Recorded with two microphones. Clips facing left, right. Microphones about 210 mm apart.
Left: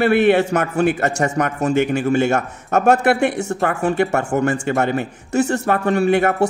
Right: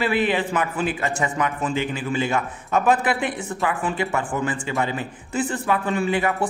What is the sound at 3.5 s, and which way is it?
Speech, 65° left (ahead or behind).